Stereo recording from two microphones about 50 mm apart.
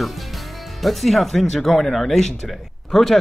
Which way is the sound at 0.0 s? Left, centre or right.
Centre.